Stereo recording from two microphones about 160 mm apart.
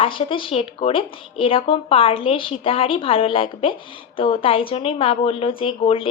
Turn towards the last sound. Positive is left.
turn(degrees=35)  # may be behind; listen again after turning